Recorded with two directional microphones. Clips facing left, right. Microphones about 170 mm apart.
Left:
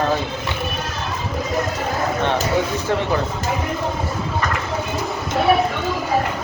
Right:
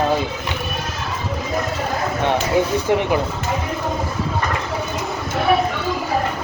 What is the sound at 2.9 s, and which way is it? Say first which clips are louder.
Speech: right 3 dB; 15° right (ahead or behind).